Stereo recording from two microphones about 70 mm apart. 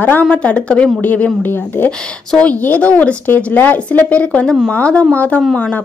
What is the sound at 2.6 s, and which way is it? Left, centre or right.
A woman's voice, left.